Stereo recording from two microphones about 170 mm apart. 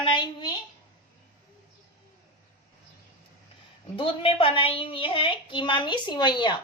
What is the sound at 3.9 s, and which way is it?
A woman's voice, 30° left (ahead or behind).